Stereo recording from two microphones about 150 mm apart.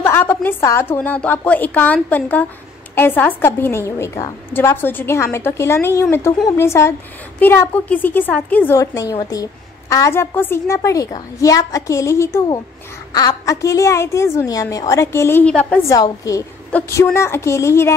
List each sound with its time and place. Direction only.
0.0 s a woman's voice: 15° left (ahead or behind)
15.9 s a woman's voice: 25° left (ahead or behind)